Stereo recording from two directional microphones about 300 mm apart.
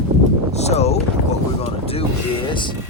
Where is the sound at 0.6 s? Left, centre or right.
Left.